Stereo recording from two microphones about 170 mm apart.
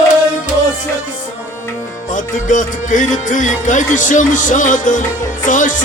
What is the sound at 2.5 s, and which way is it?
Music, 50° left (ahead or behind).